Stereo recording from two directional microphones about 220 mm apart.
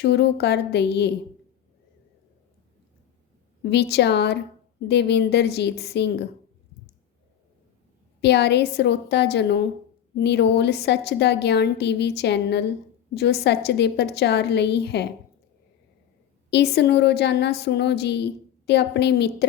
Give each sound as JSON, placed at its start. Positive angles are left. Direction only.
{"t": 0.0, "sound": "a woman's voice", "side_deg": 50}
{"t": 3.6, "sound": "a woman's voice", "side_deg": 50}
{"t": 8.2, "sound": "a woman's voice", "side_deg": 50}
{"t": 16.5, "sound": "a woman's voice", "side_deg": 50}